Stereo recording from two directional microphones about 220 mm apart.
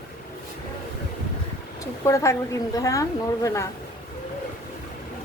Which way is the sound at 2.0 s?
15° left (ahead or behind).